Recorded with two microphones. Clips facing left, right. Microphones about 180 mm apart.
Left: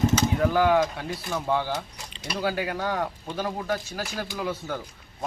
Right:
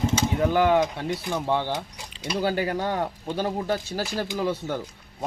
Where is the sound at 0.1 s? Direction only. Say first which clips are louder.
Even; 20° right (ahead or behind).